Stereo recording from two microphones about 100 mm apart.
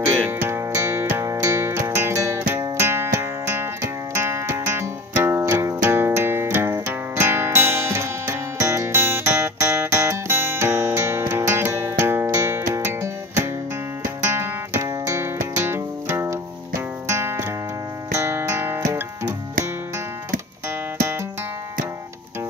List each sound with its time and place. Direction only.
0.3 s music: 25° right (ahead or behind)